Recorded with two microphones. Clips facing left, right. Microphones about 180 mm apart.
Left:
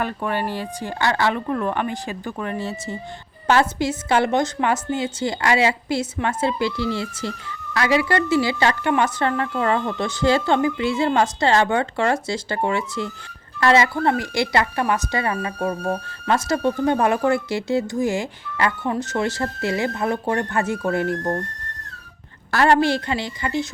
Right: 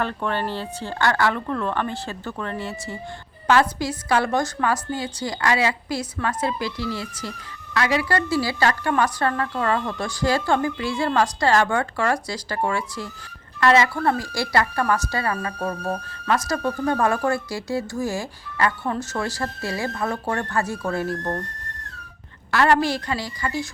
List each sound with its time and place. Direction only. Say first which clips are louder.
0.0 s a woman's voice: left 1 dB; 10° left (ahead or behind)
16.2 s a woman's voice: left 3 dB; 25° left (ahead or behind)
22.5 s a woman's voice: left 2 dB; 25° left (ahead or behind)